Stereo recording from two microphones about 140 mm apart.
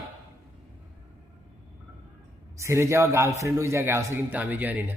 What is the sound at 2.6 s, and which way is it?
A man's voice, 20° right (ahead or behind).